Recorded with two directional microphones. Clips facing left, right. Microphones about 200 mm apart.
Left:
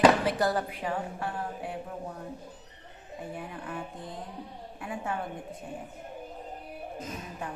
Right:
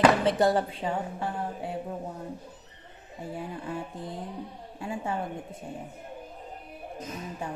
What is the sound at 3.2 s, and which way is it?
Speech, 25° right (ahead or behind).